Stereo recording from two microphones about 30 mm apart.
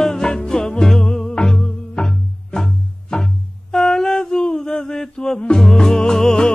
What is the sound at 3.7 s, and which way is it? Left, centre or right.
Mantra, left.